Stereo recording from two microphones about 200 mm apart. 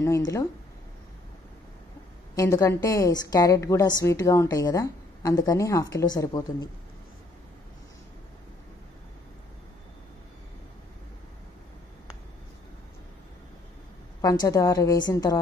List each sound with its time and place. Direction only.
0.0 s a woman's voice: 15° left (ahead or behind)
2.3 s a woman's voice: 15° left (ahead or behind)
14.2 s a woman's voice: 20° left (ahead or behind)